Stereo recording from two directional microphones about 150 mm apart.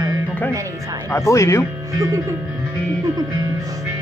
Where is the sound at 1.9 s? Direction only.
20° right (ahead or behind).